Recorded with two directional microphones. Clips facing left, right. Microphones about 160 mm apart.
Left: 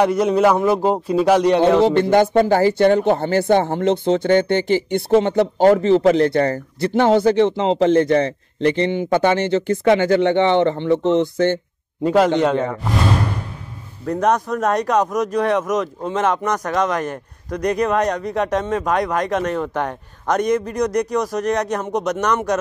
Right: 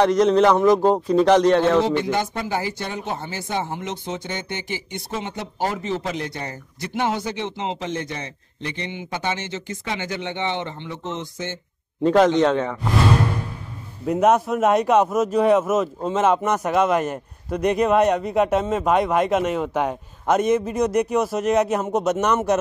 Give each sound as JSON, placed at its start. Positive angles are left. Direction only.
{"t": 0.0, "sound": "a man's voice", "side_deg": 10}
{"t": 2.0, "sound": "speech", "side_deg": 55}
{"t": 8.9, "sound": "speech", "side_deg": 55}
{"t": 12.0, "sound": "a man's voice", "side_deg": 10}
{"t": 14.0, "sound": "a man's voice", "side_deg": -5}